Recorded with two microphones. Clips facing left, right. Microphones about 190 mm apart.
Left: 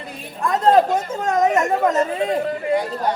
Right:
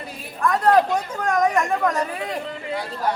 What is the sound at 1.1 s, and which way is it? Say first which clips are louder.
Speech: left 2 dB; 25° left (ahead or behind).